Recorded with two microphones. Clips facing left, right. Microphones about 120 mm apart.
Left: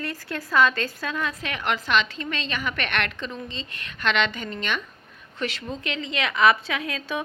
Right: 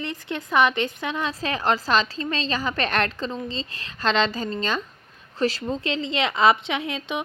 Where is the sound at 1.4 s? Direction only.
35° right (ahead or behind).